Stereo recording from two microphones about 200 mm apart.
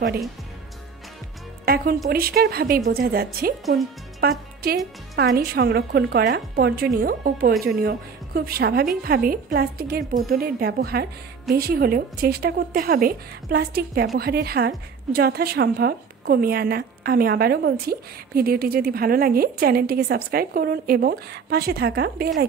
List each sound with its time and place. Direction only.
1.7 s a woman's voice: 50° right (ahead or behind)
4.2 s music: 50° right (ahead or behind)
5.1 s a woman's voice: 50° right (ahead or behind)